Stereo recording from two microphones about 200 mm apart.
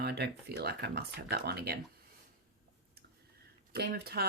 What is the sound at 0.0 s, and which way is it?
Speech, 55° right (ahead or behind).